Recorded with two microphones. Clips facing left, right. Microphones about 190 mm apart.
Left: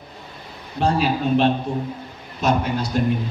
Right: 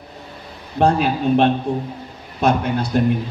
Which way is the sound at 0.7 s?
55° right (ahead or behind).